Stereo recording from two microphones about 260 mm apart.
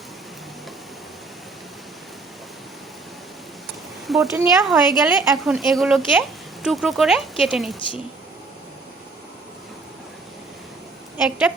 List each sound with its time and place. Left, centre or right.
4.0 s speech: centre
11.2 s speech: centre